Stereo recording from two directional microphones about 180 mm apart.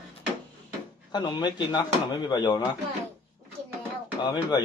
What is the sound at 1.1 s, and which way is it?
Speech, 25° left (ahead or behind).